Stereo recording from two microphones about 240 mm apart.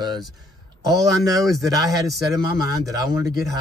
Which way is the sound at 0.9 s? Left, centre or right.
Centre.